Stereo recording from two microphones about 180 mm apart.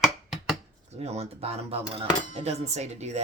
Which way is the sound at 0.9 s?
35° right (ahead or behind).